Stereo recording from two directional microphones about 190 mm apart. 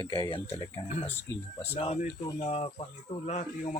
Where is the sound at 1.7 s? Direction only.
35° left (ahead or behind).